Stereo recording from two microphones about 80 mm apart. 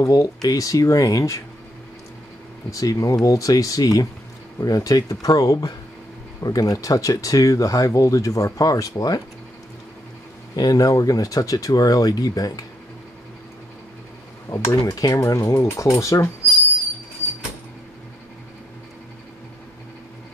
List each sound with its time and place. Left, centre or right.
0.0 s speech: left
2.7 s speech: left
10.5 s speech: left
14.5 s speech: left